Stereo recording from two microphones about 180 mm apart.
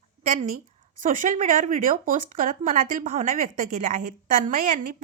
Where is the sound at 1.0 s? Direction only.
45° right (ahead or behind).